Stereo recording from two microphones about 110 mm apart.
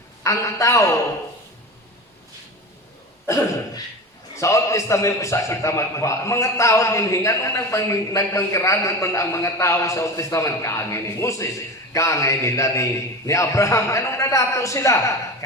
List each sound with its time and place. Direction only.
0.3 s a man's voice: 30° left (ahead or behind)
4.4 s a man's voice: 30° left (ahead or behind)